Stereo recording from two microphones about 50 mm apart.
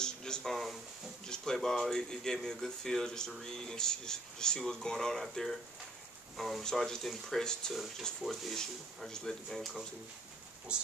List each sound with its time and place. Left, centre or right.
0.0 s a sound: centre
0.4 s speech: centre
6.6 s speech: centre
8.2 s speech: centre
8.5 s speech: centre
10.7 s speech: right